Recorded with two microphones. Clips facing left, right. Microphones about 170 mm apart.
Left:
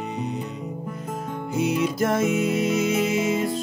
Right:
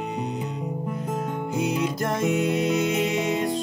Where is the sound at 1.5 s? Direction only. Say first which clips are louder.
Left 3 dB; 5° left (ahead or behind).